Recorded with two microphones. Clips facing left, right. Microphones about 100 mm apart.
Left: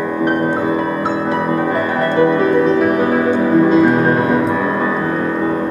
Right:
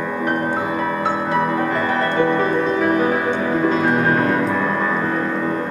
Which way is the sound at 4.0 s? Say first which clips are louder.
Left 3 dB; 15° left (ahead or behind).